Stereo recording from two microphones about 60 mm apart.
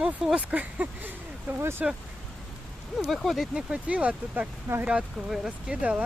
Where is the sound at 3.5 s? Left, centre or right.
Centre.